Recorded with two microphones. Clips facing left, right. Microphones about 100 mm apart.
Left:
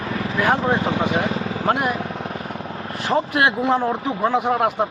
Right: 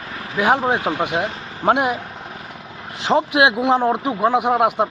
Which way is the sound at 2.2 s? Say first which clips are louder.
Left 6 dB; 50° left (ahead or behind).